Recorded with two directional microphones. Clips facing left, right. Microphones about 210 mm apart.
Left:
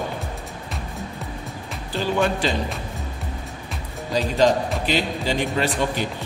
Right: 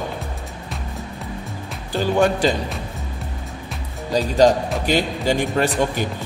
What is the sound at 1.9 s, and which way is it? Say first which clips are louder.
Speech: right 4 dB; 40° right (ahead or behind).